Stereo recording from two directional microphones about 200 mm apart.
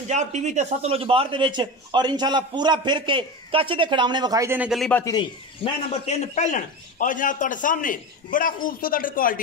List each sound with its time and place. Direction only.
0.1 s a man's voice: 35° right (ahead or behind); by 5.0 s centre (ahead or behind)
5.0 s a man's voice: 25° left (ahead or behind); by 9.4 s 45° left (ahead or behind)